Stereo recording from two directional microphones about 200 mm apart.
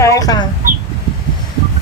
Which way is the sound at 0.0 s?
20° left (ahead or behind).